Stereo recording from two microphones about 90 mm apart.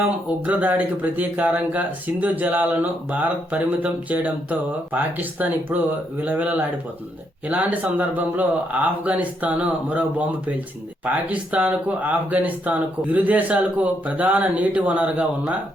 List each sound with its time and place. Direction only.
0.4 s speech: 15° right (ahead or behind)